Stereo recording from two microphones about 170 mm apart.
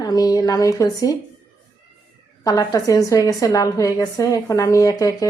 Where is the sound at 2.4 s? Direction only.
20° left (ahead or behind).